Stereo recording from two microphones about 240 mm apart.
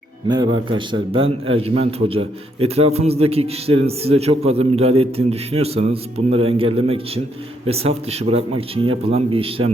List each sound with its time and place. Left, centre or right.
0.3 s a man's voice: centre